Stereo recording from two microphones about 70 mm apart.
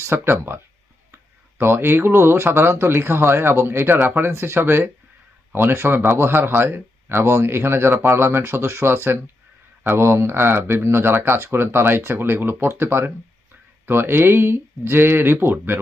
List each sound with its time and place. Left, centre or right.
0.0 s a man's voice: right